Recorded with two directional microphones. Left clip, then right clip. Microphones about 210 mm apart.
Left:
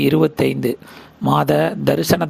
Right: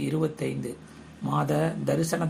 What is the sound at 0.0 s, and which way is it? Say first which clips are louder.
Speech: left 13 dB; 40° left (ahead or behind).